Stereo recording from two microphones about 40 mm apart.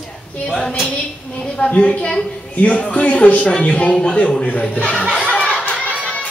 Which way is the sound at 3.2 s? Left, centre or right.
Left.